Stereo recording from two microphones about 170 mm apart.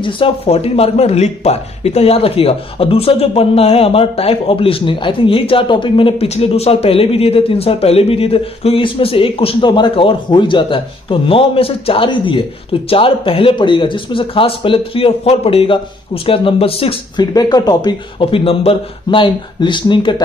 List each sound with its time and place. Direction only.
0.0 s speech: 35° left (ahead or behind)
17.3 s speech: 20° left (ahead or behind)